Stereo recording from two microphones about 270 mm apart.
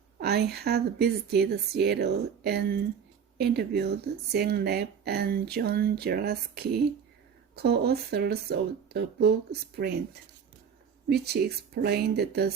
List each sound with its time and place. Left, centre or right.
0.2 s speech: right
11.1 s speech: right